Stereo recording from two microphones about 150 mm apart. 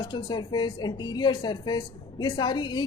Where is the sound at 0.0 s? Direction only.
30° left (ahead or behind).